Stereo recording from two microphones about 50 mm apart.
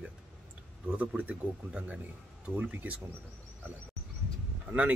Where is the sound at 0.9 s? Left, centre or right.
Right.